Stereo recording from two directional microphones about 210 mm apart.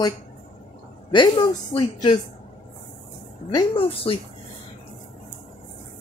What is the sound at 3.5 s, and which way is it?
Speech, 20° left (ahead or behind).